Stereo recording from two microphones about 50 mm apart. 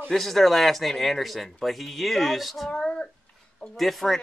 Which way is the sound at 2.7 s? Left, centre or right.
Centre.